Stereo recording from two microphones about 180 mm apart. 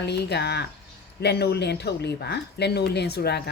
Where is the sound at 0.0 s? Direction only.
65° left (ahead or behind).